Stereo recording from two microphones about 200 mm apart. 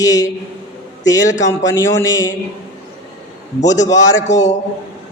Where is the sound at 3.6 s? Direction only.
15° left (ahead or behind).